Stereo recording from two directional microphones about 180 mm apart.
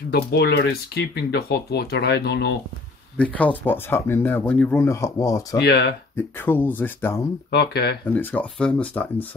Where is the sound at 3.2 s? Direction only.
10° left (ahead or behind).